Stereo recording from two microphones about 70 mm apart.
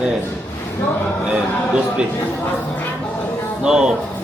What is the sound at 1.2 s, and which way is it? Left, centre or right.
Speech, centre.